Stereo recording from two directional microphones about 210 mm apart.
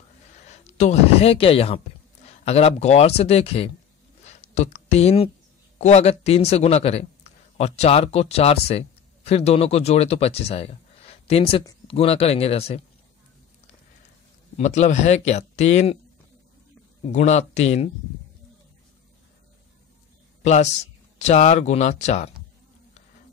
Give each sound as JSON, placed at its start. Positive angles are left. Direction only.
{"t": 0.7, "sound": "speech", "side_deg": 30}
{"t": 4.2, "sound": "a sound", "side_deg": 30}
{"t": 5.8, "sound": "speech", "side_deg": 30}
{"t": 14.6, "sound": "speech", "side_deg": 35}
{"t": 17.0, "sound": "speech", "side_deg": 35}
{"t": 20.4, "sound": "speech", "side_deg": 30}